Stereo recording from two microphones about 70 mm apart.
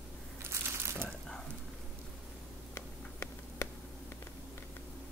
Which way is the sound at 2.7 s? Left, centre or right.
Left.